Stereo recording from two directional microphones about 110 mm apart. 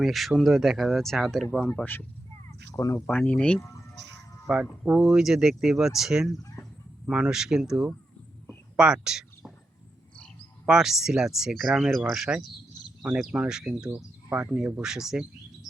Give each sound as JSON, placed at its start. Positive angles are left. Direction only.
{"t": 0.0, "sound": "speech", "side_deg": 0}
{"t": 1.6, "sound": "speech", "side_deg": 15}
{"t": 2.5, "sound": "crow", "side_deg": 30}
{"t": 3.1, "sound": "speech", "side_deg": 15}
{"t": 4.4, "sound": "speech", "side_deg": -5}
{"t": 6.3, "sound": "speech", "side_deg": 30}
{"t": 7.1, "sound": "speech", "side_deg": -5}
{"t": 10.7, "sound": "speech", "side_deg": -5}